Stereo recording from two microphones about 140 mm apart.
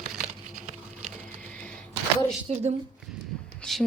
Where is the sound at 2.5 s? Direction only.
50° right (ahead or behind).